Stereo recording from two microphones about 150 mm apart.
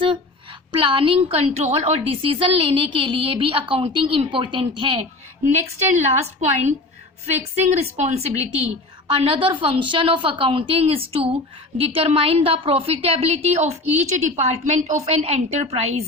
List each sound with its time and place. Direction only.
0.8 s a woman's voice: 35° right (ahead or behind)
5.9 s a woman's voice: 50° right (ahead or behind)